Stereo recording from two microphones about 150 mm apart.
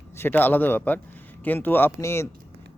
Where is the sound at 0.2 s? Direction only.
15° left (ahead or behind).